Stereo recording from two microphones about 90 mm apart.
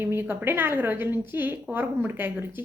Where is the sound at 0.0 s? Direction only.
25° right (ahead or behind).